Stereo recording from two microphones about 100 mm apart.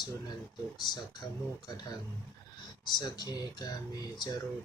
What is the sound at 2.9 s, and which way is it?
Speech, 45° left (ahead or behind).